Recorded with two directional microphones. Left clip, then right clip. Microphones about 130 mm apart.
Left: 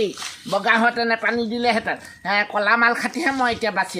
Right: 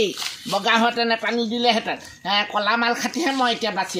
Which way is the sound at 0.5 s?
10° left (ahead or behind).